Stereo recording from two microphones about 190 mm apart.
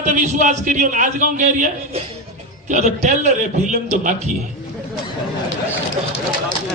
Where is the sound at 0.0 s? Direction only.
40° right (ahead or behind).